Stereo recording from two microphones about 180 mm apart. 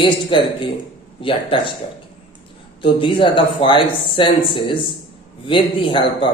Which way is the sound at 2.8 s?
30° left (ahead or behind).